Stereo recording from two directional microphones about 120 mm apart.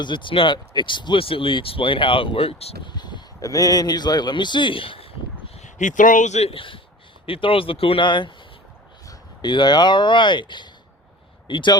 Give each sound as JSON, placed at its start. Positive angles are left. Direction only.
{"t": 0.0, "sound": "speech", "side_deg": 40}
{"t": 2.8, "sound": "speech", "side_deg": 35}
{"t": 5.5, "sound": "speech", "side_deg": 90}